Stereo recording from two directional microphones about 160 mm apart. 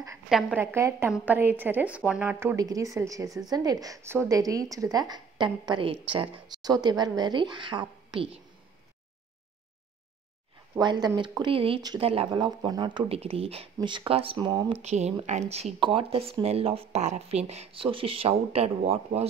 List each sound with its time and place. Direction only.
0.3 s a woman's voice: centre (ahead or behind)
0.6 s a woman's voice: 15° right (ahead or behind)
2.5 s a woman's voice: 20° right (ahead or behind)
10.7 s a woman's voice: 25° right (ahead or behind)
14.8 s speech: 45° right (ahead or behind)